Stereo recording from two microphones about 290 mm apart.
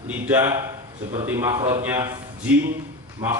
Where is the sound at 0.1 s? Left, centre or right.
Centre.